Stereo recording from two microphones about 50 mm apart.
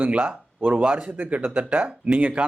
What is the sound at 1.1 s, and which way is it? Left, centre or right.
Speech, right.